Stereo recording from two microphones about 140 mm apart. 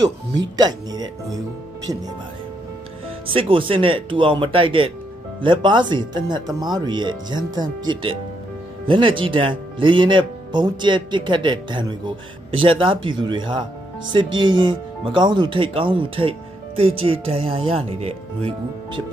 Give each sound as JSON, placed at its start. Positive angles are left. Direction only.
{"t": 0.0, "sound": "speech", "side_deg": -30}
{"t": 3.3, "sound": "speech", "side_deg": -40}